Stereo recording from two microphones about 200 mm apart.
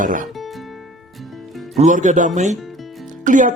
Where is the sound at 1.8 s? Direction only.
40° right (ahead or behind).